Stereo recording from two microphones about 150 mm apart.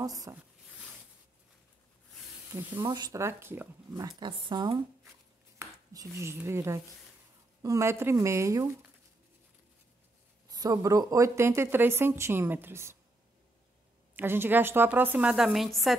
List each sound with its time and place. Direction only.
0.0 s speech: 25° right (ahead or behind)
2.5 s speech: 15° right (ahead or behind)
4.2 s speech: 35° right (ahead or behind)
5.6 s speech: 20° right (ahead or behind)
10.5 s speech: 25° right (ahead or behind)
14.1 s speech: 15° right (ahead or behind)